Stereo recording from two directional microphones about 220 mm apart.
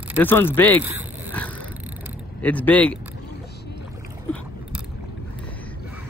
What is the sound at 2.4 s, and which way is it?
Speech, 5° left (ahead or behind).